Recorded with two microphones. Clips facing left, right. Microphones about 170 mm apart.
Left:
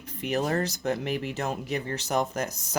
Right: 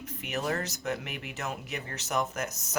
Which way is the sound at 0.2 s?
35° left (ahead or behind).